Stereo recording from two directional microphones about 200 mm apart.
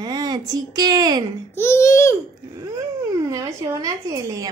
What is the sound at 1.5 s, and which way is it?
Speech, 15° left (ahead or behind).